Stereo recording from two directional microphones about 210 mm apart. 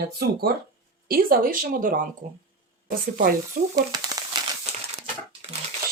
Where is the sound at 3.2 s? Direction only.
40° right (ahead or behind).